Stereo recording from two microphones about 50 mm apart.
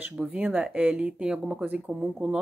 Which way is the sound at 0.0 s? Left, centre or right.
Right.